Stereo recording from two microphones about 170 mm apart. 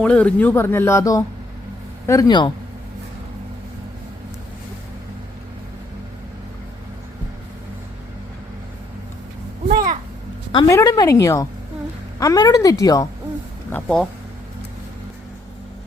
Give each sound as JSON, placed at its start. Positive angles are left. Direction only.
{"t": 0.0, "sound": "a woman's voice", "side_deg": 10}
{"t": 9.7, "sound": "a sound", "side_deg": -50}
{"t": 10.5, "sound": "a woman's voice", "side_deg": 20}
{"t": 13.7, "sound": "speech", "side_deg": 10}